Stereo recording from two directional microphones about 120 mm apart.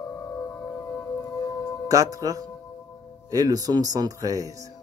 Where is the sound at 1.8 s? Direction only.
30° right (ahead or behind).